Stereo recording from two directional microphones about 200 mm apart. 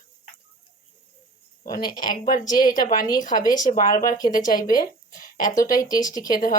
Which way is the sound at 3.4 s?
20° left (ahead or behind).